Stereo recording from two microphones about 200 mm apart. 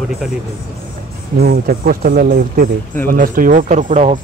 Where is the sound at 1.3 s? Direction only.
45° right (ahead or behind).